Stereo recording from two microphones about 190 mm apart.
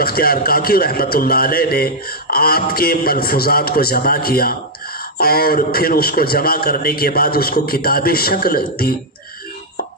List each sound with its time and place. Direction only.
0.0 s a man's voice: 50° left (ahead or behind)